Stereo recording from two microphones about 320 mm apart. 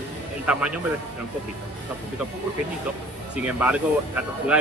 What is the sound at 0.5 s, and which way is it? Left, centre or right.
Speech, centre.